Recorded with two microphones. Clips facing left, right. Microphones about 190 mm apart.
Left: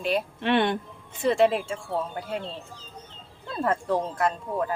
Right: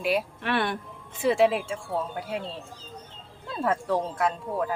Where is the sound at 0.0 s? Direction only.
5° right (ahead or behind).